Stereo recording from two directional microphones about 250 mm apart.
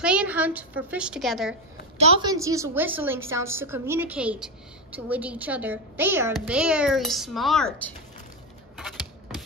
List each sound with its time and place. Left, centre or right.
0.0 s speech: centre
2.0 s a woman's voice: right; by 7.9 s centre
8.7 s a sound: centre